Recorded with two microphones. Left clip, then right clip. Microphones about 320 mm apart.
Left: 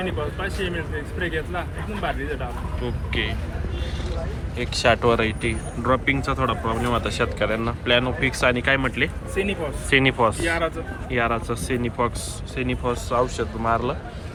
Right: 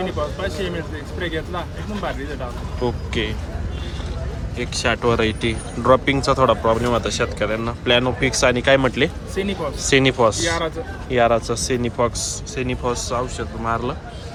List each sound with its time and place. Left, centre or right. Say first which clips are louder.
2.8 s speech: right 4 dB; centre
4.5 s speech: left 2 dB; centre